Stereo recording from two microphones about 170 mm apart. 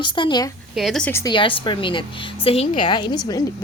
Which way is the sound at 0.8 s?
Centre (ahead or behind).